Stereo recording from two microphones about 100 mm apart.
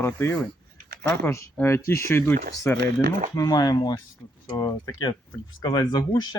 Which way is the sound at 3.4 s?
40° left (ahead or behind).